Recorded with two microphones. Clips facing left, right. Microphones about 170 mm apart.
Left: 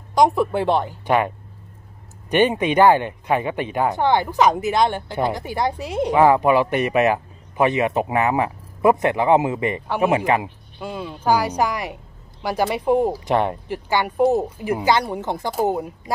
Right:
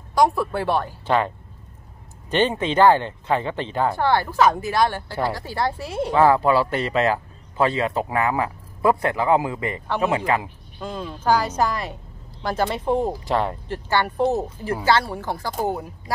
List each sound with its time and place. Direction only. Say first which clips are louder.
0.1 s a man's voice: left 2 dB; 20° left (ahead or behind)
2.3 s a man's voice: left 3 dB; 15° left (ahead or behind)
10.8 s a man's voice: left 1 dB; 10° left (ahead or behind)